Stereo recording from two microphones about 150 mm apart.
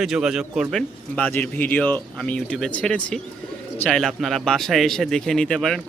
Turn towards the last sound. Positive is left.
turn(degrees=0)  # may be behind; listen again after turning